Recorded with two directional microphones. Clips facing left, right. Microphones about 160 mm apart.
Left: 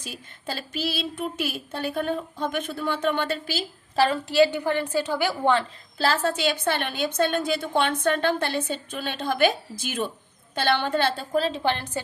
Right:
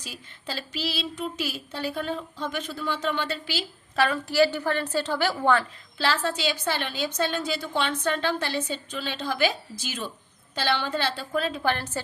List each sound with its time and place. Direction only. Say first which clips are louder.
0.0 s a woman's voice: left 3 dB; 50° left (ahead or behind)
3.9 s a woman's voice: left 3 dB; 30° left (ahead or behind)
6.0 s a woman's voice: left 3 dB; 45° left (ahead or behind); by 12.0 s 20° left (ahead or behind)